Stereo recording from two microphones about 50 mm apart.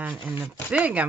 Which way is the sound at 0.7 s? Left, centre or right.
Right.